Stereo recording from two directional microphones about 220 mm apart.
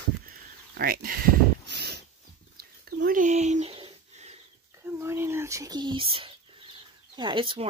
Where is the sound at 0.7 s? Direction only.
40° right (ahead or behind).